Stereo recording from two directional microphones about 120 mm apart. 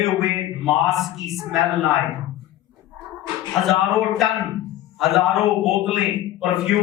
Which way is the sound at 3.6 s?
Centre (ahead or behind).